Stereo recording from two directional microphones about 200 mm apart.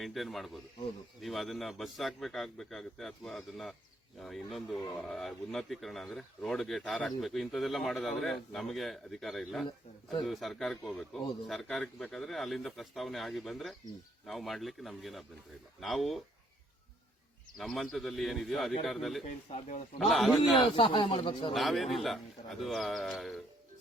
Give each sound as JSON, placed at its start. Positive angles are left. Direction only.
{"t": 0.0, "sound": "speech", "side_deg": 0}
{"t": 17.6, "sound": "speech", "side_deg": 0}
{"t": 19.3, "sound": "speech", "side_deg": 40}
{"t": 20.0, "sound": "speech", "side_deg": 0}
{"t": 20.6, "sound": "speech", "side_deg": 25}
{"t": 21.5, "sound": "speech", "side_deg": 0}